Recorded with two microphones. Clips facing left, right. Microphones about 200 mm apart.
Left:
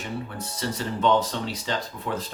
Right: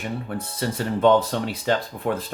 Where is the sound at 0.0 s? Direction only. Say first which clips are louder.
Right 3 dB; 55° right (ahead or behind).